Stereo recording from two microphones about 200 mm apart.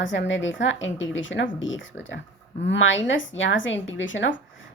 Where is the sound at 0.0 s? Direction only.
70° left (ahead or behind).